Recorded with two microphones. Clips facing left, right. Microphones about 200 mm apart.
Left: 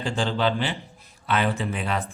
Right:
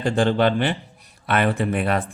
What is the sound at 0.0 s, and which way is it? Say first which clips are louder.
A man's voice: right 6 dB; 55° right (ahead or behind).